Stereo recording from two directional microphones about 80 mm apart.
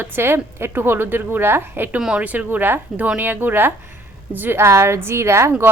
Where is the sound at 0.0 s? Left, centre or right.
Right.